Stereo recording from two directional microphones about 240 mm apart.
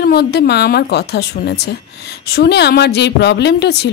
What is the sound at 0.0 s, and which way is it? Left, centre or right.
A woman's voice, left.